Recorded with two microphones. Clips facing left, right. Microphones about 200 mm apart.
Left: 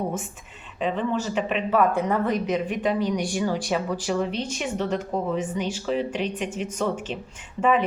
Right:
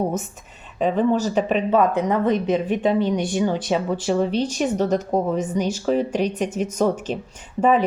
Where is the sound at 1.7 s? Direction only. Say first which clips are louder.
Right 2 dB; 20° right (ahead or behind).